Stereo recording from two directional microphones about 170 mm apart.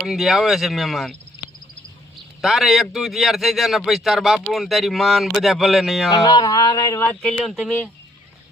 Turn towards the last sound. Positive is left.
turn(degrees=0)  # may be behind; listen again after turning